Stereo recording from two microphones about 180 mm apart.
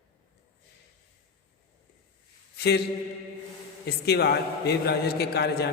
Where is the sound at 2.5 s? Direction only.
60° left (ahead or behind).